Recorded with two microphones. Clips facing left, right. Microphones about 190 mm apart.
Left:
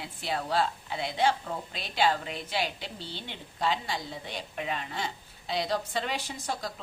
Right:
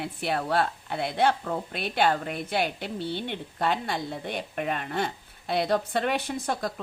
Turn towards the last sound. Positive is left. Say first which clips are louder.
# right 6 dB
turn(degrees=-55)  # may be behind; listen again after turning